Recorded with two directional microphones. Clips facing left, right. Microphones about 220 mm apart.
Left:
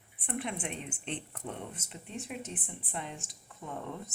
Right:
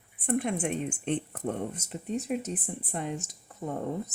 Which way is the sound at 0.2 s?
45° right (ahead or behind).